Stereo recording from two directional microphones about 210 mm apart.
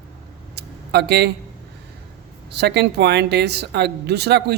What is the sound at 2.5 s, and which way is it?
A woman's voice, 50° right (ahead or behind).